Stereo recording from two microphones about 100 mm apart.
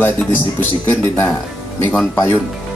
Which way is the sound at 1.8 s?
20° left (ahead or behind).